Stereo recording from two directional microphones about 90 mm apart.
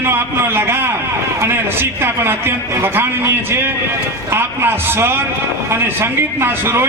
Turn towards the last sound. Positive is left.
turn(degrees=-25)  # may be behind; listen again after turning